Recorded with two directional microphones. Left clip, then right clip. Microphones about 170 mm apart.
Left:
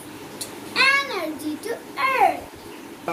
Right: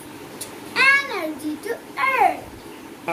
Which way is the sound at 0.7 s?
10° left (ahead or behind).